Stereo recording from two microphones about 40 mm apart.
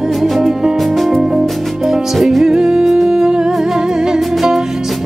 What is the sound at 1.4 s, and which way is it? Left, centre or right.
Music, centre.